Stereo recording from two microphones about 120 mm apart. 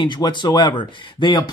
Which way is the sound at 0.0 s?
40° left (ahead or behind).